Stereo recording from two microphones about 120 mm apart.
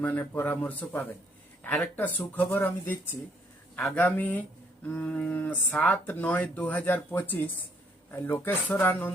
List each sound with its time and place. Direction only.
0.0 s speech: 15° left (ahead or behind)